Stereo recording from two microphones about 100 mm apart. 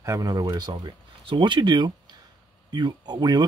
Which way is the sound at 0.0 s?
35° right (ahead or behind).